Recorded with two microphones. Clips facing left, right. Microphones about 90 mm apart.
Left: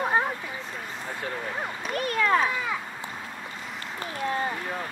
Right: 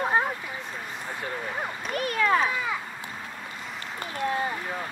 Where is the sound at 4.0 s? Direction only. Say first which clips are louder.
Right 1 dB; 10° right (ahead or behind).